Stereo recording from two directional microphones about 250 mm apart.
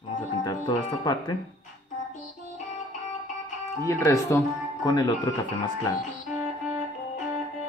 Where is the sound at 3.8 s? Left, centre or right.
Centre.